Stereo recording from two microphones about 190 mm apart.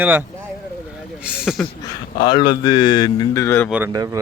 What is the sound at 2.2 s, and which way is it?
Speech, 25° left (ahead or behind).